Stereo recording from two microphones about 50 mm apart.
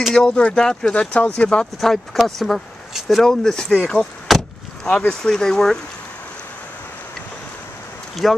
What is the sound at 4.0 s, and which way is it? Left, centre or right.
Vehicle, centre.